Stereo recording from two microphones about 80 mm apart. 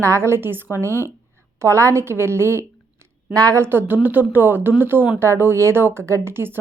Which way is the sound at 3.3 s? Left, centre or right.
Right.